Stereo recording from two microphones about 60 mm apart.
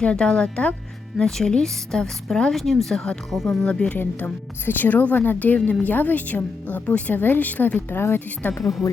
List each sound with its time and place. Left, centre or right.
0.0 s a woman's voice: centre
3.9 s a woman's voice: left
8.8 s speech: left